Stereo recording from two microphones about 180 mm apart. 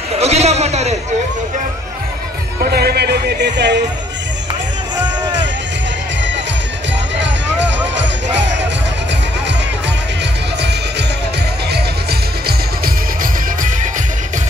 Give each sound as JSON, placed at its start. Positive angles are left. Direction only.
{"t": 0.2, "sound": "a sound", "side_deg": -35}
{"t": 2.6, "sound": "a man's voice", "side_deg": -60}
{"t": 11.7, "sound": "music", "side_deg": -60}